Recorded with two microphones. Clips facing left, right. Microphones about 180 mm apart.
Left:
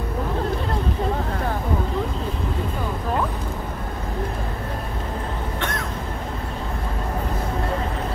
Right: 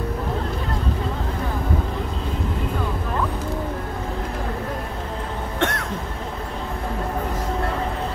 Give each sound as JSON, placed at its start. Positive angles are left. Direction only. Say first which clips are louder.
{"t": 5.6, "sound": "cough", "louder": "right 6 dB", "side_deg": -70}